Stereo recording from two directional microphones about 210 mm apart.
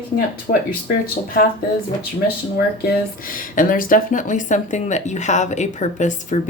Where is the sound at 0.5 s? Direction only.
45° left (ahead or behind).